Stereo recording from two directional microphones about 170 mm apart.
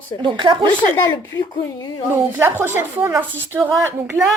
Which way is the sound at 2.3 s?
10° right (ahead or behind).